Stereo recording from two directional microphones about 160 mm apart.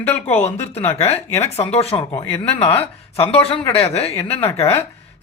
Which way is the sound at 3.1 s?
35° left (ahead or behind).